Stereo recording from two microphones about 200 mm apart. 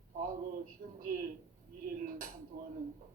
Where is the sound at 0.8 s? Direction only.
45° right (ahead or behind).